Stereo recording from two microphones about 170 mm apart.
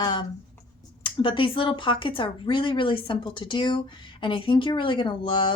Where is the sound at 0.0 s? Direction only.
25° left (ahead or behind).